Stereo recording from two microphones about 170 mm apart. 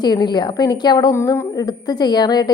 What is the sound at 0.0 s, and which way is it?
A woman's voice, 25° left (ahead or behind).